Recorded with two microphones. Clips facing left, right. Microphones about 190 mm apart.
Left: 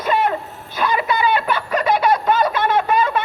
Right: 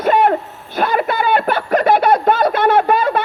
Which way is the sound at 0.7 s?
55° right (ahead or behind).